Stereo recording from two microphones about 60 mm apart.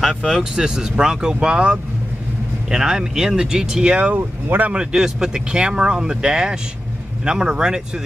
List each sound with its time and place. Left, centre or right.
0.4 s speech: centre
4.1 s speech: right
4.7 s speech: centre